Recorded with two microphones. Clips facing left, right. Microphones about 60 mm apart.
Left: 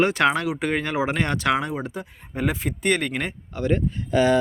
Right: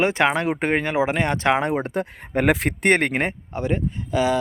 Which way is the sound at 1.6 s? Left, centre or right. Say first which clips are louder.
Right 6 dB; right.